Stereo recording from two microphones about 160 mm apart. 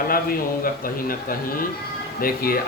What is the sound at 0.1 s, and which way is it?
A man's voice, 65° left (ahead or behind).